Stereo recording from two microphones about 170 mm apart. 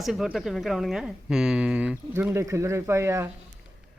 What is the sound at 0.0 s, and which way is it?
Speech, centre (ahead or behind).